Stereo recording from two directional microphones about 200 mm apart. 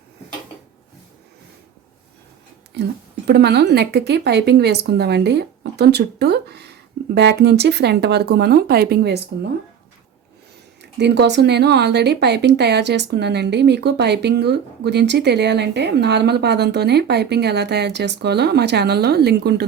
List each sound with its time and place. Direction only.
3.2 s speech: 55° right (ahead or behind)
10.9 s speech: 60° right (ahead or behind)